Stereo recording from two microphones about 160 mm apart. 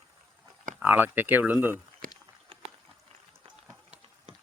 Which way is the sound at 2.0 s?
60° right (ahead or behind).